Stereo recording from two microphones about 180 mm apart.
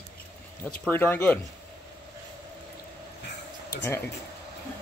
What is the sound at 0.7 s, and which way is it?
Speech, 10° left (ahead or behind).